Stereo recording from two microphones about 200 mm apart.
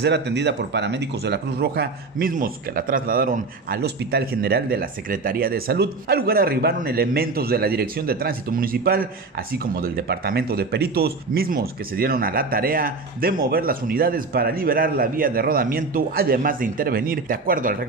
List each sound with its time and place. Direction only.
0.0 s speech: 60° right (ahead or behind)